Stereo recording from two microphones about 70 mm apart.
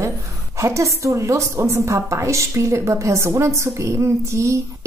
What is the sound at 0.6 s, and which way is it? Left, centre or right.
A woman's voice, right.